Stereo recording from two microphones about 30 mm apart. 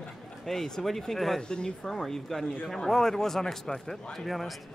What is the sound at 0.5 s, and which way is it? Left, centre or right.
Speech, centre.